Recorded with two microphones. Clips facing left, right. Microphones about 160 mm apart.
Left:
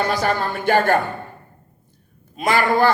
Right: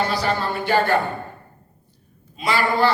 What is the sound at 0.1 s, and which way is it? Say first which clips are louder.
Speech: left 2 dB; 50° left (ahead or behind).